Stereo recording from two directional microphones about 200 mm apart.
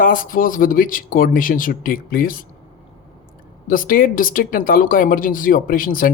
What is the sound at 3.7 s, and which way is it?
Speech, 45° left (ahead or behind).